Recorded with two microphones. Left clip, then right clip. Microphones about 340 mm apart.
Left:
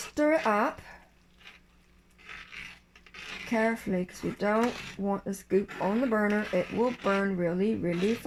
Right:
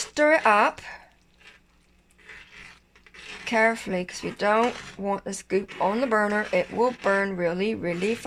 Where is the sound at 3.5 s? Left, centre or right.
Right.